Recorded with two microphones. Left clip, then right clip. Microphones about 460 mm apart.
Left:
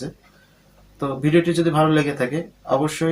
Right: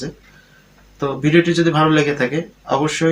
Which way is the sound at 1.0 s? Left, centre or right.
Left.